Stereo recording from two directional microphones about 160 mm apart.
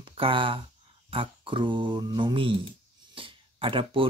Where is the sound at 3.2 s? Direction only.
35° right (ahead or behind).